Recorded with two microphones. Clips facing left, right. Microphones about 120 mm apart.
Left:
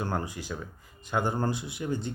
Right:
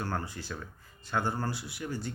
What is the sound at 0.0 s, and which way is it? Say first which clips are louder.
Speech: left 3 dB; 15° left (ahead or behind).